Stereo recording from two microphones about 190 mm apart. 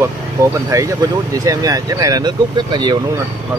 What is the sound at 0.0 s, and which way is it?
Speech, 15° right (ahead or behind).